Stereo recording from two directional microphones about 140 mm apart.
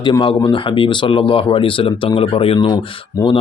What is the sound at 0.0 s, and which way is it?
Speech, 35° left (ahead or behind).